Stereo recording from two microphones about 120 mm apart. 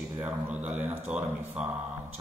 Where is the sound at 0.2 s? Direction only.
15° right (ahead or behind).